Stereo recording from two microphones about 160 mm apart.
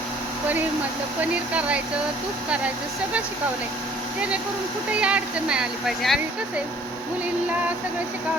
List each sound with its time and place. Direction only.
1.2 s speech: 10° right (ahead or behind)
4.9 s speech: 5° right (ahead or behind)